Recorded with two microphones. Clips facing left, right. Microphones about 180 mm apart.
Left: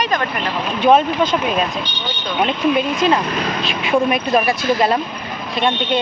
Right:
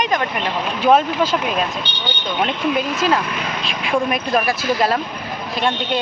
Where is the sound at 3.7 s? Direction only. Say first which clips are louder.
Left 3 dB; centre (ahead or behind).